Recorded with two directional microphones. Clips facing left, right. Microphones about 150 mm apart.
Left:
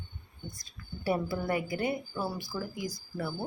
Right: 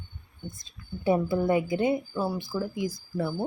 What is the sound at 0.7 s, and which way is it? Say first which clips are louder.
Speech: right 6 dB; 20° right (ahead or behind).